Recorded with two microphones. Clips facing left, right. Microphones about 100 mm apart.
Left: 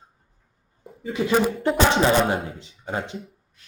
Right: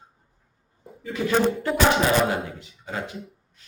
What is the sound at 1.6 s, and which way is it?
Speech, 30° left (ahead or behind).